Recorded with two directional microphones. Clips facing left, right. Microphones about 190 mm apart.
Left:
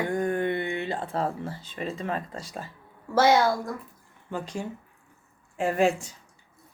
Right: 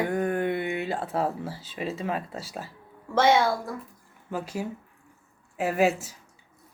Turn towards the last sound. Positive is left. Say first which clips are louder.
# even
turn(degrees=-5)  # may be behind; listen again after turning